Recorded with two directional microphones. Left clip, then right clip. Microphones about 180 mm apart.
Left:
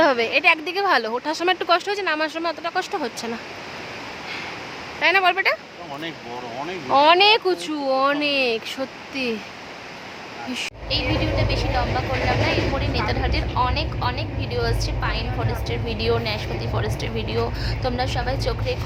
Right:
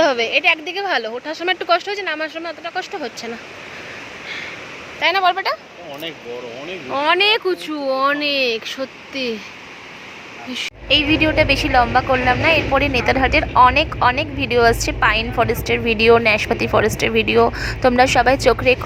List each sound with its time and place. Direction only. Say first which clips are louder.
0.0 s speech: right 2 dB; 5° left (ahead or behind)
4.9 s speech: right 2 dB; centre (ahead or behind)
6.8 s speech: left 1 dB; 5° left (ahead or behind)
11.1 s speech: right 9 dB; 40° right (ahead or behind)